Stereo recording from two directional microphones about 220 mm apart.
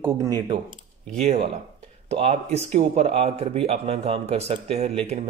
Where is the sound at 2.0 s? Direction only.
30° right (ahead or behind).